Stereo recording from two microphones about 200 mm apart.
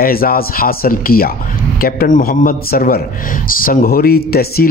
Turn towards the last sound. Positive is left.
turn(degrees=50)  # may be behind; listen again after turning